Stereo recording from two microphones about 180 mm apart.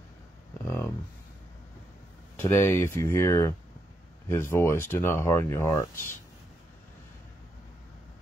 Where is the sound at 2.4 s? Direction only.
10° left (ahead or behind).